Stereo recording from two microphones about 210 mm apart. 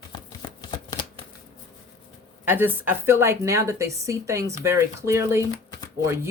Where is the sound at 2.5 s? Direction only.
10° right (ahead or behind).